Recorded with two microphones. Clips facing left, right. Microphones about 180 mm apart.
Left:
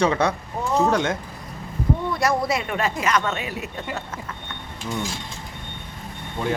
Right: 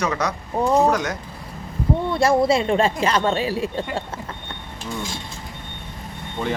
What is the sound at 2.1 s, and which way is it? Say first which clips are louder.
Speech: right 8 dB; 25° right (ahead or behind).